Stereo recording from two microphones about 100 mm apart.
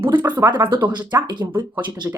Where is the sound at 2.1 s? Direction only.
20° right (ahead or behind).